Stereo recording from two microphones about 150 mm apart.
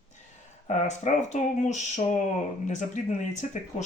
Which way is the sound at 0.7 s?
50° left (ahead or behind).